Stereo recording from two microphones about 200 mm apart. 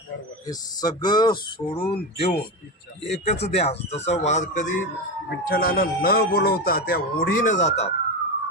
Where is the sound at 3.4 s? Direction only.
30° left (ahead or behind).